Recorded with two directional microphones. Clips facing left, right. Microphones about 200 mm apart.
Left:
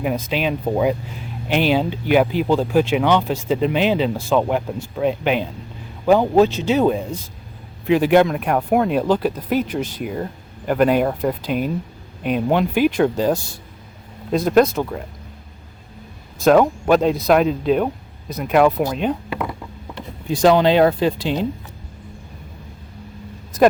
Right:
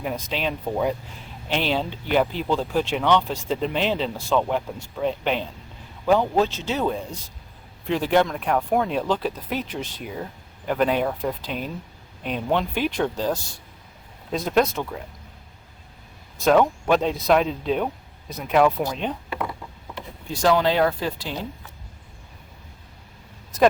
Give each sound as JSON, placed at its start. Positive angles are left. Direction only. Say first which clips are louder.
{"t": 0.0, "sound": "speech", "louder": "left 6 dB", "side_deg": 10}
{"t": 16.4, "sound": "speech", "louder": "left 4 dB", "side_deg": 5}
{"t": 20.2, "sound": "speech", "louder": "left 6 dB", "side_deg": 15}